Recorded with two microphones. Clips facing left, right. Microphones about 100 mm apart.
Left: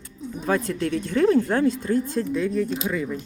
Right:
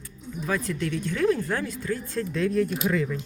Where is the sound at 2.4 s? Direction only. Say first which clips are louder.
Right 3 dB; 5° left (ahead or behind).